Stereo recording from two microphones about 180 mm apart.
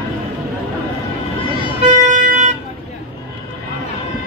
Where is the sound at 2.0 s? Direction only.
45° right (ahead or behind).